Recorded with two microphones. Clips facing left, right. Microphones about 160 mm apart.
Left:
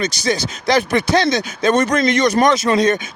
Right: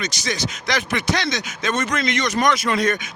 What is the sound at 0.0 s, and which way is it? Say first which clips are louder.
Speech: left 6 dB; 30° left (ahead or behind).